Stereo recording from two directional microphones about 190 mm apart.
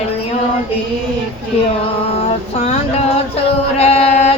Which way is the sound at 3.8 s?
30° left (ahead or behind).